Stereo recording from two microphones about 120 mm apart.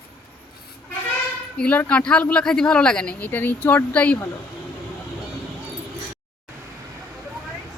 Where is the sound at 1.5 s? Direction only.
15° left (ahead or behind).